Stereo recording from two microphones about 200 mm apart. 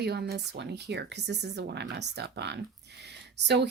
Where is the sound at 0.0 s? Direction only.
55° right (ahead or behind).